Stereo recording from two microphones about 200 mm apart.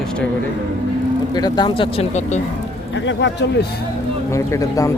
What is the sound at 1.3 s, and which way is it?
Speech, 20° left (ahead or behind).